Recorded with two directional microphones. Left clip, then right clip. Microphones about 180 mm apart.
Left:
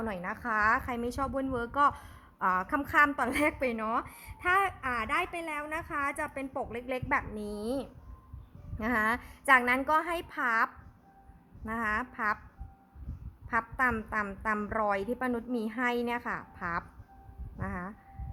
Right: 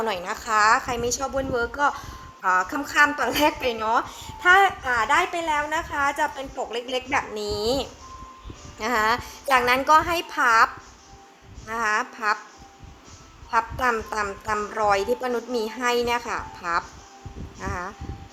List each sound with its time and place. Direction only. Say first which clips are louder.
0.0 s a woman's voice: right 8 dB; 10° left (ahead or behind); by 6.3 s 35° left (ahead or behind)
6.7 s a woman's voice: right 6 dB; 20° left (ahead or behind)
8.8 s a woman's voice: right 7 dB; 20° left (ahead or behind)
13.5 s a woman's voice: right 7 dB; 20° left (ahead or behind)